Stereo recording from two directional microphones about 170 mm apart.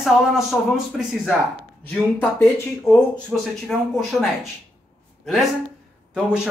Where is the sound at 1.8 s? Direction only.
10° left (ahead or behind).